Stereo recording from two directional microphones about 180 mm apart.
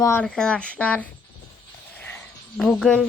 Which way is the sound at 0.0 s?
15° left (ahead or behind).